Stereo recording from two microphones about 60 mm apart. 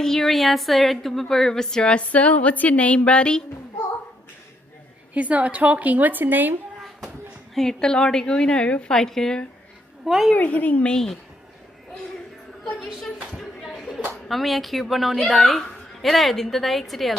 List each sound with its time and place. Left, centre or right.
0.0 s a woman's voice: centre
5.1 s a woman's voice: right
7.5 s a woman's voice: centre
10.0 s a woman's voice: centre
10.3 s a woman's voice: left
10.9 s a woman's voice: centre
12.7 s a woman's voice: centre
13.7 s a sound: centre
14.3 s a woman's voice: centre